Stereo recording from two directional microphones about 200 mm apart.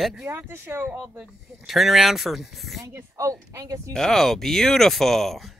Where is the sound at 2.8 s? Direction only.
15° right (ahead or behind).